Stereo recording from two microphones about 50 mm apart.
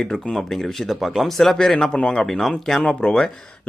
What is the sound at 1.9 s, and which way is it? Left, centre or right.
Speech, centre.